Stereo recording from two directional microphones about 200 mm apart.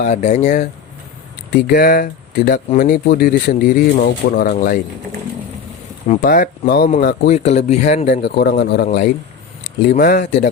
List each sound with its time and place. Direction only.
0.0 s speech: 35° left (ahead or behind)
1.5 s speech: 50° left (ahead or behind)
6.2 s speech: 50° left (ahead or behind)
7.3 s speech: 35° left (ahead or behind)
8.2 s speech: 55° left (ahead or behind)
9.9 s speech: 40° left (ahead or behind)